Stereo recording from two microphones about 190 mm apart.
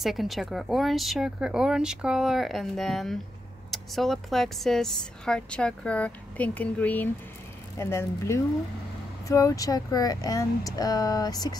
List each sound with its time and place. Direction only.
0.0 s speech: centre (ahead or behind); by 11.5 s 20° left (ahead or behind)